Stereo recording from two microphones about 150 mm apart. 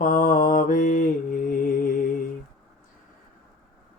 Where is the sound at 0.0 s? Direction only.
65° left (ahead or behind).